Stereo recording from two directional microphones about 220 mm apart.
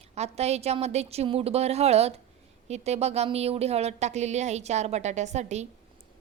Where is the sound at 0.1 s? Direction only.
30° right (ahead or behind).